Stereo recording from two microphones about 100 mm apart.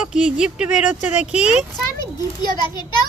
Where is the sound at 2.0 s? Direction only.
45° left (ahead or behind).